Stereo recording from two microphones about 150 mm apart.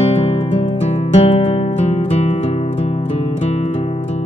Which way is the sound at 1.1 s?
40° left (ahead or behind).